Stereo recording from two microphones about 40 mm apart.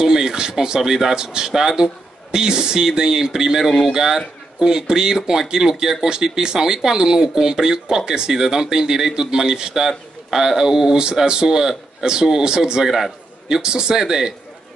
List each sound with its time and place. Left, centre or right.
0.0 s speech: centre
12.8 s a man's voice: centre
13.6 s speech: right